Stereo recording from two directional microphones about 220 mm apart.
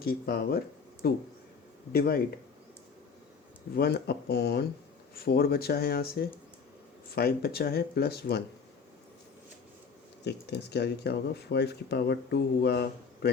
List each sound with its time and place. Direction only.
0.0 s speech: 45° left (ahead or behind)
3.8 s speech: 45° left (ahead or behind)
10.2 s speech: 50° left (ahead or behind)